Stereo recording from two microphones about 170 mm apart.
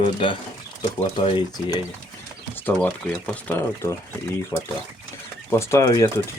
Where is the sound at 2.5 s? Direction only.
10° left (ahead or behind).